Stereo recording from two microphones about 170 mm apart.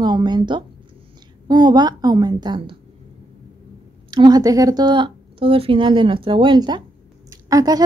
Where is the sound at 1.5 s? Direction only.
25° right (ahead or behind).